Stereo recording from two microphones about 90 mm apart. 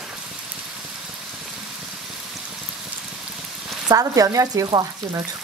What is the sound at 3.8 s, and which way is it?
Speech, 40° right (ahead or behind).